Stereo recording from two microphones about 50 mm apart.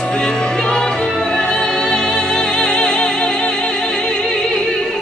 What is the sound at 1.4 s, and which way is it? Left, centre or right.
Music, centre.